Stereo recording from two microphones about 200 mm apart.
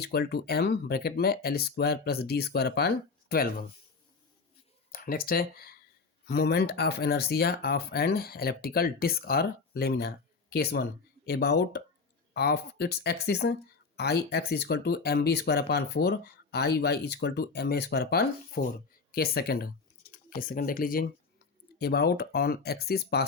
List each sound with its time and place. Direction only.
0.0 s speech: 55° left (ahead or behind)
4.9 s speech: 45° left (ahead or behind)